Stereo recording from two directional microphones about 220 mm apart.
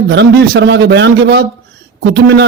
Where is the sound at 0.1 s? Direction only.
50° right (ahead or behind).